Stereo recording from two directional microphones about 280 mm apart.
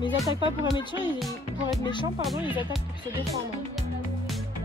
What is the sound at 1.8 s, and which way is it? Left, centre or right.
Speech, centre.